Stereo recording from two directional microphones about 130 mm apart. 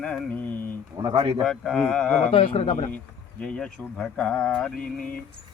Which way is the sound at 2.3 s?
45° left (ahead or behind).